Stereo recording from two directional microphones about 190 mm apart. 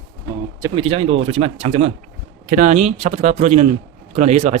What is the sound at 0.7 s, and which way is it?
Speech, 30° right (ahead or behind).